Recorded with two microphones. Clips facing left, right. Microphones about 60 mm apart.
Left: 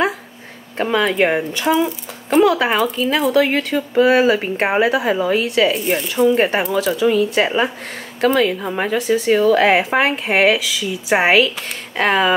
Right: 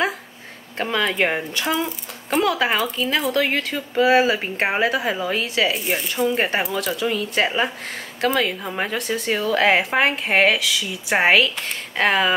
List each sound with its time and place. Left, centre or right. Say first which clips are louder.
0.7 s speech: left 5 dB; centre